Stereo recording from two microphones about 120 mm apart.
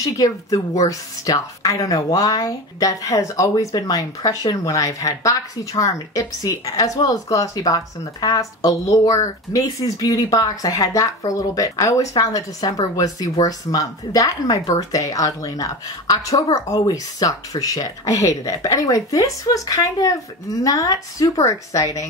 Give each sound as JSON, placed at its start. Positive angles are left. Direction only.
{"t": 0.0, "sound": "speech", "side_deg": 30}